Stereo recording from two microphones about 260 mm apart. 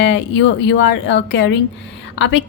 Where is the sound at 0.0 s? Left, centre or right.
Left.